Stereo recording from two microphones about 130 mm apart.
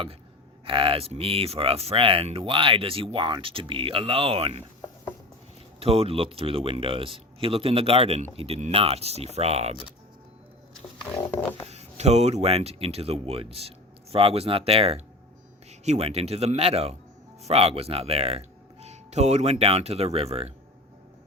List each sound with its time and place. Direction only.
0.6 s speech: 45° right (ahead or behind)
5.8 s speech: 50° right (ahead or behind)
11.3 s a sound: 15° left (ahead or behind)
11.7 s speech: 55° right (ahead or behind)